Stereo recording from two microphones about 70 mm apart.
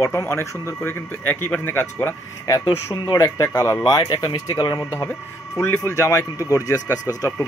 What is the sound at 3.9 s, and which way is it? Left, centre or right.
Speech, left.